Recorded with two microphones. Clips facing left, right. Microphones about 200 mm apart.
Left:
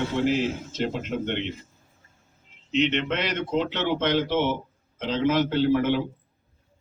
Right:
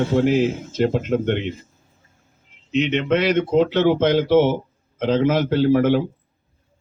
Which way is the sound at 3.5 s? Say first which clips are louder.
Right 7 dB; 50° right (ahead or behind).